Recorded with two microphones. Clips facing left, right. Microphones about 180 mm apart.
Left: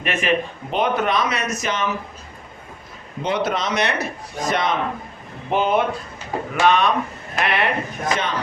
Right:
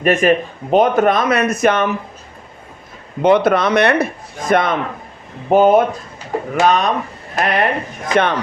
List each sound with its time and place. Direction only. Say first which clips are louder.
0.0 s speech: right 8 dB; 45° right (ahead or behind)
3.2 s a man's voice: right 10 dB; 55° right (ahead or behind)
5.5 s speech: right 8 dB; 45° right (ahead or behind)
8.1 s a man's voice: right 9 dB; 60° right (ahead or behind)